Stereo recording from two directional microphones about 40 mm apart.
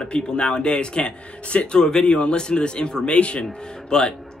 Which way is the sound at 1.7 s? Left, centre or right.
Centre.